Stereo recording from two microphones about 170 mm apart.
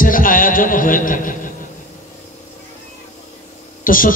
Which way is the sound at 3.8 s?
55° left (ahead or behind).